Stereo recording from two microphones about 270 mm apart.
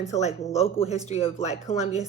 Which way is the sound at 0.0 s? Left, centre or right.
Left.